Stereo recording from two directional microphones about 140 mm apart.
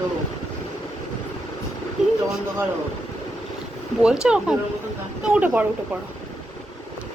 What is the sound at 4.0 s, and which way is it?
A woman's voice, 5° right (ahead or behind).